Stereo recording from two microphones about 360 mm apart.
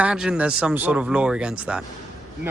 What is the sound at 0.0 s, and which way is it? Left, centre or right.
Speech, centre.